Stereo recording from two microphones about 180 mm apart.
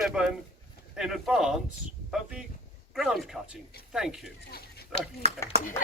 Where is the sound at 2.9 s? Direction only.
Centre (ahead or behind).